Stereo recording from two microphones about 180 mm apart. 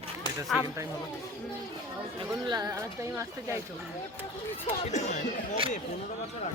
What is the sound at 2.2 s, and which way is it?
Speech, 20° right (ahead or behind).